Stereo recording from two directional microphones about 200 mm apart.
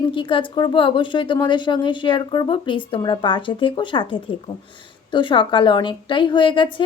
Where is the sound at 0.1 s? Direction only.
25° left (ahead or behind).